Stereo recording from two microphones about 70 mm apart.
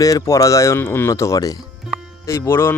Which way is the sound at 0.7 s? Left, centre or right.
Left.